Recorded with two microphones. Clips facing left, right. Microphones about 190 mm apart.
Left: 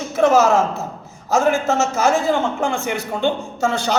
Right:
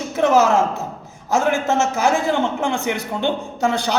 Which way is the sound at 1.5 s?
15° right (ahead or behind).